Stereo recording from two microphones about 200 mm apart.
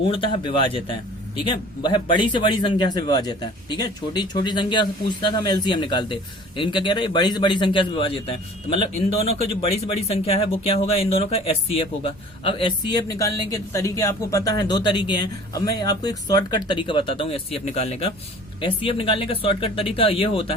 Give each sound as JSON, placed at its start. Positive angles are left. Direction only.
{"t": 0.1, "sound": "a man's voice", "side_deg": 25}